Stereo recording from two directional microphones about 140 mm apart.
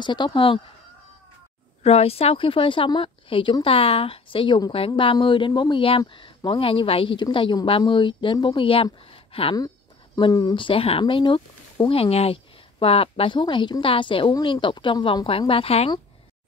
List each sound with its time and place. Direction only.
0.0 s speech: 30° left (ahead or behind)
1.8 s speech: 45° left (ahead or behind)
9.0 s a sound: 40° left (ahead or behind)
10.1 s speech: 30° left (ahead or behind)